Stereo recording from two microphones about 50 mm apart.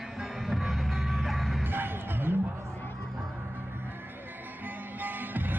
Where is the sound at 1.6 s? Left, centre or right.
Right.